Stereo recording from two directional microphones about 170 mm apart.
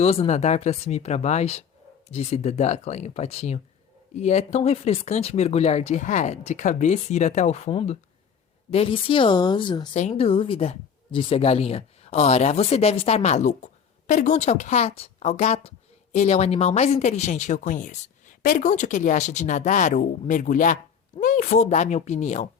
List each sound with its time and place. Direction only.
0.0 s a woman's voice: 40° left (ahead or behind)
9.9 s speech: 40° left (ahead or behind)